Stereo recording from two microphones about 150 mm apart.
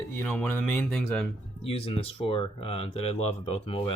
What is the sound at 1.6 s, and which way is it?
Speech, 40° left (ahead or behind).